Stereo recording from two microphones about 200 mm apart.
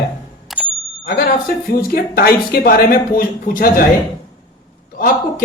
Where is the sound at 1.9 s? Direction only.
50° left (ahead or behind).